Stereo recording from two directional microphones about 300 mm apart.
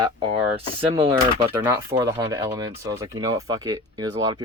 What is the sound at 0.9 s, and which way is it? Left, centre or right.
Speech, centre.